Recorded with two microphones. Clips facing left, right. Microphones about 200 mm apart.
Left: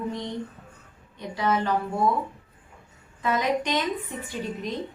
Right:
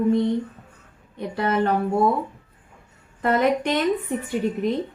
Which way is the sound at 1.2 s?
60° right (ahead or behind).